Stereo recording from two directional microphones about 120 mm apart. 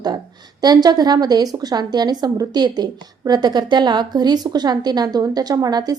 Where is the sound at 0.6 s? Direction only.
35° right (ahead or behind).